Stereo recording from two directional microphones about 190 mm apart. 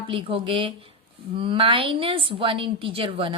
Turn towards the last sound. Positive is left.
turn(degrees=-25)  # may be behind; listen again after turning